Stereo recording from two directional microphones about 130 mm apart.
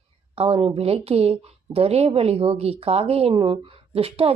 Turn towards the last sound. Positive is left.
turn(degrees=-50)  # may be behind; listen again after turning